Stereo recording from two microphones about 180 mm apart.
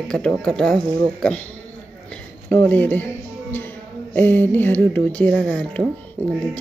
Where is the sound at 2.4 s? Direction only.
10° left (ahead or behind).